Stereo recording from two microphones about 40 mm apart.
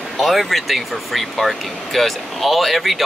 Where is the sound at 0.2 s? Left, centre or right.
Centre.